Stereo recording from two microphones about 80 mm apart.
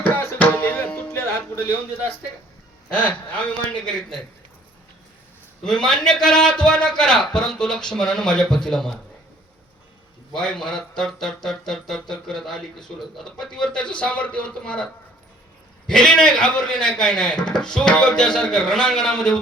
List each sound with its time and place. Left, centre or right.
0.1 s music: centre
2.9 s speech: centre
5.6 s speech: centre
10.3 s speech: centre
15.9 s speech: centre